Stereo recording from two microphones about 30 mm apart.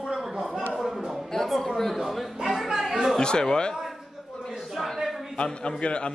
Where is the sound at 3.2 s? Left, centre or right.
Left.